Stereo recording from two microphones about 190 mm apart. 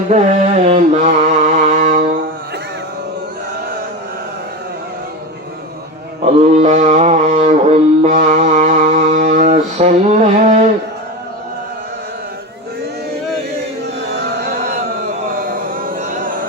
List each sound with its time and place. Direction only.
0.1 s mantra: 35° right (ahead or behind)
6.2 s mantra: 35° right (ahead or behind)
14.3 s music: 55° right (ahead or behind)
15.3 s a sound: 50° right (ahead or behind)